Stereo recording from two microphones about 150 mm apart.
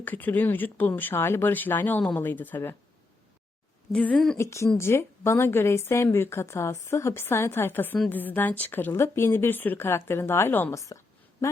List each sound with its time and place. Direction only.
0.0 s speech: 10° left (ahead or behind)
3.9 s a woman's voice: 5° left (ahead or behind)
4.4 s speech: 20° left (ahead or behind)